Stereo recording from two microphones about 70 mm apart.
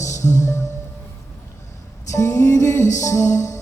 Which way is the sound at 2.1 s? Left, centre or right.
Left.